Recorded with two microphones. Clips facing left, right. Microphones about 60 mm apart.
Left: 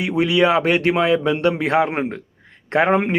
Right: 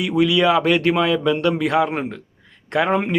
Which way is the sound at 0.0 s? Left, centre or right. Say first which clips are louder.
Even; left.